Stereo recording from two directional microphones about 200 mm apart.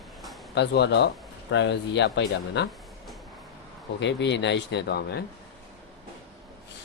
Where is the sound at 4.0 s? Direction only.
60° left (ahead or behind).